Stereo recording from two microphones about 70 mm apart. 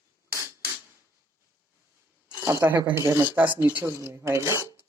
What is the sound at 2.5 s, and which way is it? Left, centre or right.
Speech, right.